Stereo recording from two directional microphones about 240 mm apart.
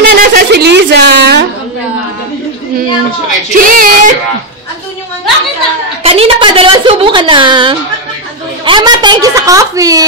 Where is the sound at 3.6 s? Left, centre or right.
Right.